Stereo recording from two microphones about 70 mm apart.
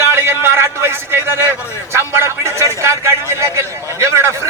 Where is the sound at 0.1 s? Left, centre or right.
Right.